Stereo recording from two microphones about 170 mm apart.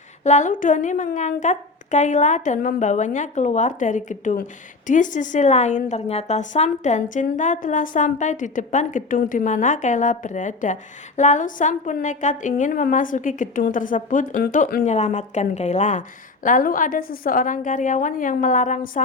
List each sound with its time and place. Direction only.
0.3 s a woman's voice: 45° left (ahead or behind)